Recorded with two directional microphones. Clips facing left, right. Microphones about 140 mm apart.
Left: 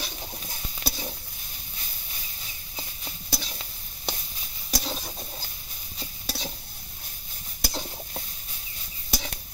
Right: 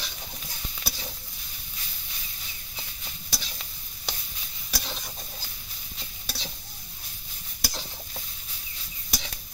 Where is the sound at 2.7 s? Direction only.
35° left (ahead or behind).